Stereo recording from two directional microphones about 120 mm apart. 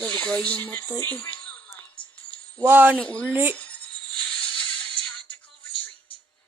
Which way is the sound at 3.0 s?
10° left (ahead or behind).